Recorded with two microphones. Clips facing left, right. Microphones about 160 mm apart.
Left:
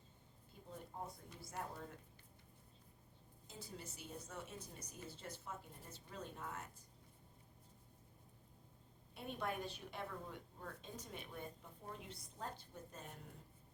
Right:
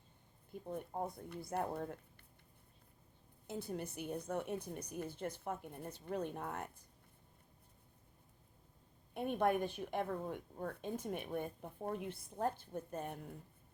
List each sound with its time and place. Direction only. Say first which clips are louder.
0.7 s a woman's voice: right 9 dB; 55° right (ahead or behind)
3.4 s a woman's voice: right 11 dB; 60° right (ahead or behind)
9.1 s a woman's voice: right 10 dB; 55° right (ahead or behind)